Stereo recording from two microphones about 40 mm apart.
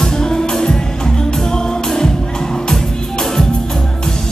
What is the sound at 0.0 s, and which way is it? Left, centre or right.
Music, centre.